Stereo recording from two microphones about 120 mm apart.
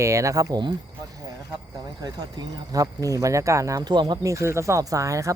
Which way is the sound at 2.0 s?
30° right (ahead or behind).